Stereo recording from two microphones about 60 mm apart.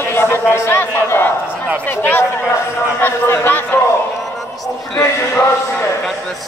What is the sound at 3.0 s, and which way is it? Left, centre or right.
Speech, left.